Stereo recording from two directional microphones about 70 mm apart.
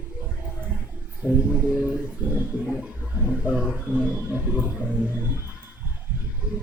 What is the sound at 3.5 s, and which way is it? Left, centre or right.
Speech, centre.